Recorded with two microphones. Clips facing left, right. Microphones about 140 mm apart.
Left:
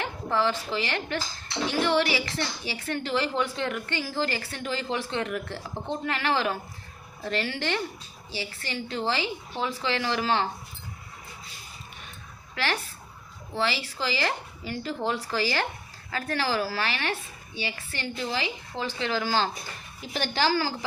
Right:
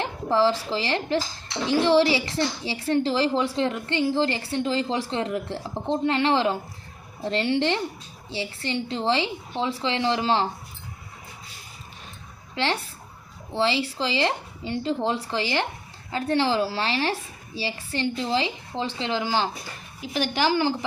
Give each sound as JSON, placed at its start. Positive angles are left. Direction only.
{"t": 0.0, "sound": "a woman's voice", "side_deg": -30}
{"t": 12.6, "sound": "a woman's voice", "side_deg": -25}